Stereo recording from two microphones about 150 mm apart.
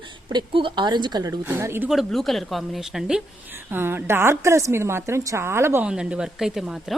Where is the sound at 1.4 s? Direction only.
15° right (ahead or behind).